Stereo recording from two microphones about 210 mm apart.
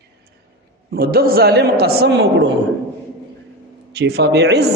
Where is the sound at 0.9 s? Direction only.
45° right (ahead or behind).